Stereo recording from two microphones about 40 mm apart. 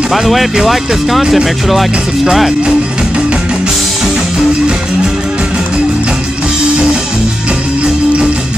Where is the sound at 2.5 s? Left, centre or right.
Right.